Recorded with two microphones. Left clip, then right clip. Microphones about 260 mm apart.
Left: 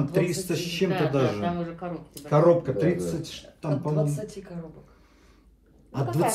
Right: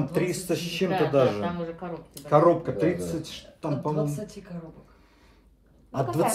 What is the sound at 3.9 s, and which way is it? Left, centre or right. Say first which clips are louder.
Speech: left 1 dB; left.